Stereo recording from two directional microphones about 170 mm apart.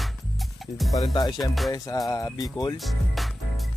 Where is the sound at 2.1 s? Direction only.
20° left (ahead or behind).